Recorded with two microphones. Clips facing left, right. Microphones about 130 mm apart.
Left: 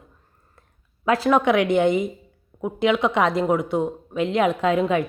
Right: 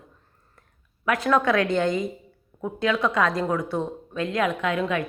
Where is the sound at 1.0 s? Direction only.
30° left (ahead or behind).